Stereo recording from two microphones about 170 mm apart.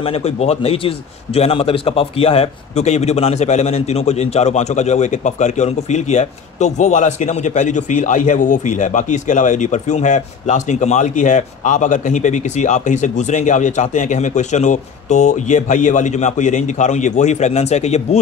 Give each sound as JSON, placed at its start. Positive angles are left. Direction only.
{"t": 0.0, "sound": "a man's voice", "side_deg": 35}